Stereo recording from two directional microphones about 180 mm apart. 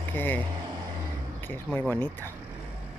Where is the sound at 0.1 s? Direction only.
10° left (ahead or behind).